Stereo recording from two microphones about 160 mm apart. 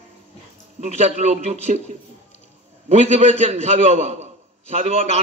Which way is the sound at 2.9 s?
45° right (ahead or behind).